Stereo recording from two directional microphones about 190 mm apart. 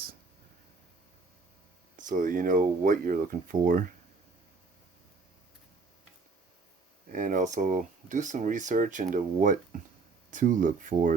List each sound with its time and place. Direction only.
2.0 s speech: 45° right (ahead or behind)
7.1 s speech: 45° right (ahead or behind)